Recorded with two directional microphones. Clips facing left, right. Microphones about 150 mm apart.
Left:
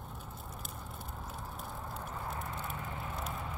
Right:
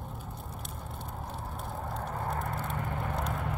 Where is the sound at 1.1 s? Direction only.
55° right (ahead or behind).